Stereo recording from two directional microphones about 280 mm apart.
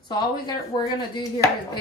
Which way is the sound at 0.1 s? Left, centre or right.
Centre.